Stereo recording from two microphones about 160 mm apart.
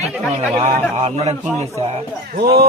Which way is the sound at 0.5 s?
45° right (ahead or behind).